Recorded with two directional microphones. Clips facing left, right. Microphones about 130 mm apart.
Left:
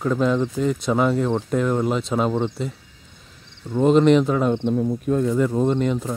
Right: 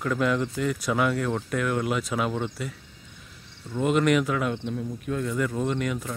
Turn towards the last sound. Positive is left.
turn(degrees=30)  # may be behind; listen again after turning